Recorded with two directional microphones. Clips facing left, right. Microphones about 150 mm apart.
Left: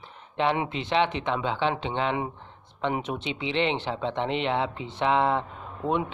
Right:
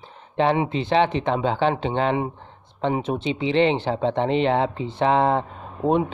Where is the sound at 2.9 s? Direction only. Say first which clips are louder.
Right 6 dB; 30° right (ahead or behind).